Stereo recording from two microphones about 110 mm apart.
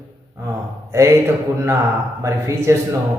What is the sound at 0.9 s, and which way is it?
A man's voice, 25° right (ahead or behind).